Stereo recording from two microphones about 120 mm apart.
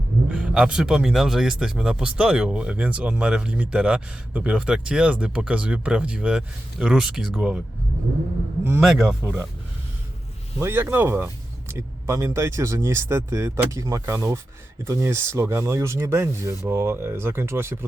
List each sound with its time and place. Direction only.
0.3 s speech: 10° right (ahead or behind)
8.8 s speech: 5° right (ahead or behind)
10.6 s speech: 20° right (ahead or behind)